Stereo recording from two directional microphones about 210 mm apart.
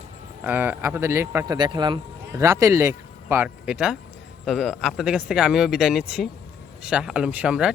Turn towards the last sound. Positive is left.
turn(degrees=-5)  # may be behind; listen again after turning